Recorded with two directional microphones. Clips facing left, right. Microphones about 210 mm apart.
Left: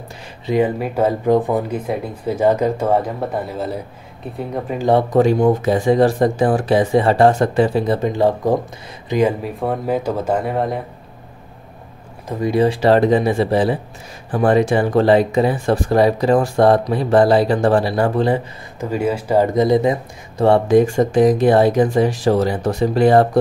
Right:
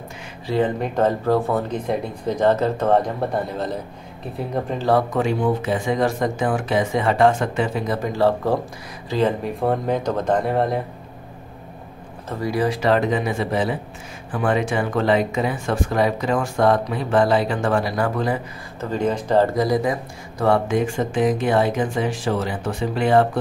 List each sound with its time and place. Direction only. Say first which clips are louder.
0.5 s speech: left 3 dB; 10° left (ahead or behind)
5.1 s speech: left 7 dB; 40° left (ahead or behind)
8.1 s speech: even; 15° left (ahead or behind)
9.4 s speech: even; 5° left (ahead or behind)
12.3 s speech: left 5 dB; 20° left (ahead or behind)
18.8 s speech: left 2 dB; 10° left (ahead or behind)
19.5 s speech: left 5 dB; 25° left (ahead or behind); by 23.2 s 40° left (ahead or behind)